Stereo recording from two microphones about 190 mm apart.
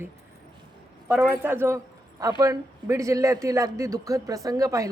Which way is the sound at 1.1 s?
5° right (ahead or behind).